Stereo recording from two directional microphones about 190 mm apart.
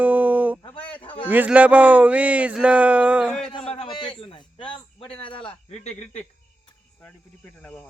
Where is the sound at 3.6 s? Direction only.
30° left (ahead or behind).